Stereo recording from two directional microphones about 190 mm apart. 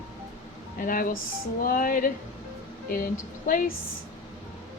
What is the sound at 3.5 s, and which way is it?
Speech, 45° left (ahead or behind).